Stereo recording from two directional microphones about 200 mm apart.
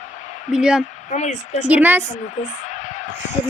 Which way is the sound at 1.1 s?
35° left (ahead or behind).